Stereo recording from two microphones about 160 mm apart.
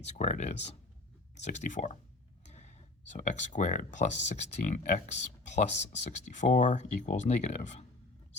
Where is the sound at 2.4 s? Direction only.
45° left (ahead or behind).